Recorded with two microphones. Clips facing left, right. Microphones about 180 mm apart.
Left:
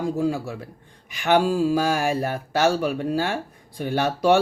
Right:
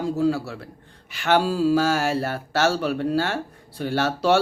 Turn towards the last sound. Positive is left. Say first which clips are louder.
# left 1 dB
turn(degrees=15)  # may be behind; listen again after turning